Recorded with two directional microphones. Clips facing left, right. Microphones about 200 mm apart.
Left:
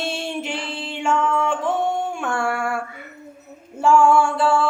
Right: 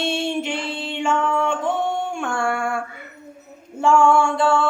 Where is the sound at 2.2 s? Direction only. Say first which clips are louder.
Right 1 dB; 5° left (ahead or behind).